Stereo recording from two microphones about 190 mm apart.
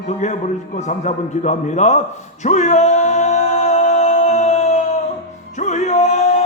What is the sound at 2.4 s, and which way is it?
A capella, 40° left (ahead or behind).